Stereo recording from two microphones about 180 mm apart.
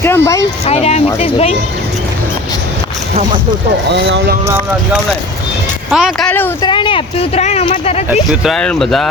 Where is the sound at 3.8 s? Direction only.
70° right (ahead or behind).